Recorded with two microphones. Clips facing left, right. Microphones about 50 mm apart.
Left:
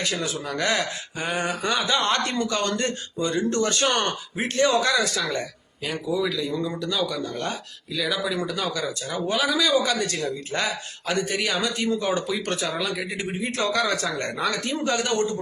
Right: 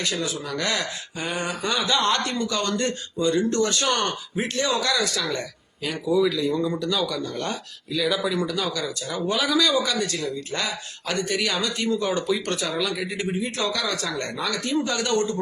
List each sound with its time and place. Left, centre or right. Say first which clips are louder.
0.0 s a man's voice: even; left
5.8 s speech: right 4 dB; centre
8.6 s speech: even; centre
9.2 s speech: right 1 dB; centre
9.8 s a man's voice: left 1 dB; left
11.3 s speech: even; centre
11.6 s speech: even; left
13.1 s a man's voice: right 1 dB; left